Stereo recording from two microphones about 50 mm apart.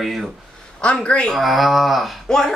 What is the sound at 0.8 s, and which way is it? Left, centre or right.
Speech, left.